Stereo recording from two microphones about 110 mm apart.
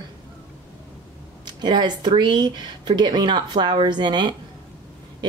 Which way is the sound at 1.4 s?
40° right (ahead or behind).